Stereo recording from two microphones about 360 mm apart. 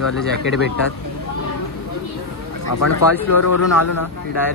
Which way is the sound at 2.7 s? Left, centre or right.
Left.